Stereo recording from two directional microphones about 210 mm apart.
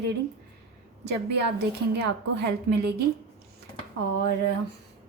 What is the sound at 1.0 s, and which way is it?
A woman's voice, 55° right (ahead or behind).